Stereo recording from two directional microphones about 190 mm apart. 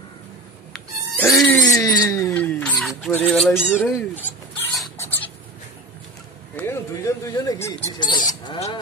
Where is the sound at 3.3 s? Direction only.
Centre (ahead or behind).